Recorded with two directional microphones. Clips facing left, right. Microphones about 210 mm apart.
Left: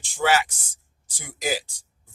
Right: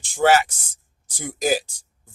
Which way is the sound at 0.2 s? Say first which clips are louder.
Right 5 dB; 50° right (ahead or behind).